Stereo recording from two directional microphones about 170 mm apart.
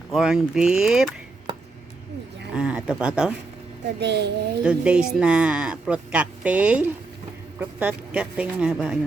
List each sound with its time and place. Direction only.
0.1 s speech: 5° right (ahead or behind)
2.5 s speech: 10° right (ahead or behind)
4.0 s a woman's voice: 85° right
4.6 s speech: 5° right (ahead or behind)